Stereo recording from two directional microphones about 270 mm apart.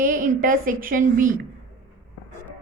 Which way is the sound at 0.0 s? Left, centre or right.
Right.